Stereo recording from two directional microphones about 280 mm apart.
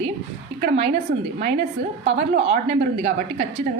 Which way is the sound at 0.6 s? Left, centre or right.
Right.